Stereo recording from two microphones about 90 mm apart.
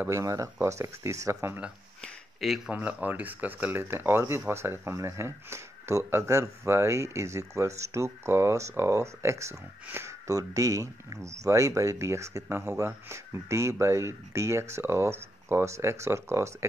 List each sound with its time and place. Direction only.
0.1 s speech: 35° right (ahead or behind)
2.4 s speech: 5° right (ahead or behind)
2.7 s speech: 15° right (ahead or behind)